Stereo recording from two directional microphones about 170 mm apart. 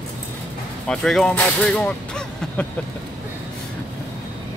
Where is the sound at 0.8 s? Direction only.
5° left (ahead or behind).